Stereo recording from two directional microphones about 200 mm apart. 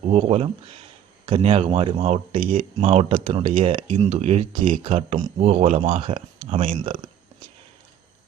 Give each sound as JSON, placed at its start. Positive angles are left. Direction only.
{"t": 0.1, "sound": "speech", "side_deg": -30}